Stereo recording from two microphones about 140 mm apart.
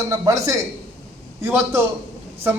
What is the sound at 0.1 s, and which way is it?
A man's voice, 25° right (ahead or behind).